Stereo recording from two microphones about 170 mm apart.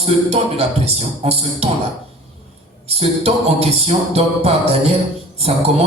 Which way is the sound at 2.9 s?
40° right (ahead or behind).